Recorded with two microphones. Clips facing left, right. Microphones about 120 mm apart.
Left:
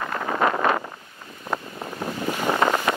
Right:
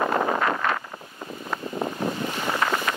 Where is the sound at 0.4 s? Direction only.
25° left (ahead or behind).